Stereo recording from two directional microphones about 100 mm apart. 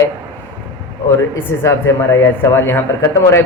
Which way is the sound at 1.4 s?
25° left (ahead or behind).